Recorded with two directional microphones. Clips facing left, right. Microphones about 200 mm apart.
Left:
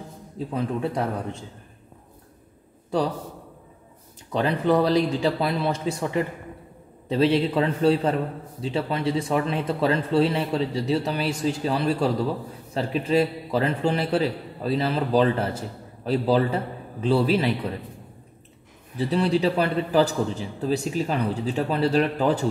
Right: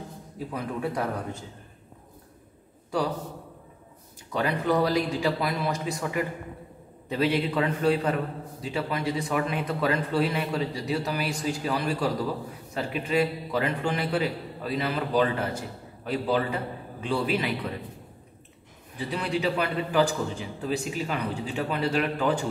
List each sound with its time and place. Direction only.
0.5 s a man's voice: 25° left (ahead or behind)
4.3 s a man's voice: 30° left (ahead or behind)
18.9 s a man's voice: 35° left (ahead or behind)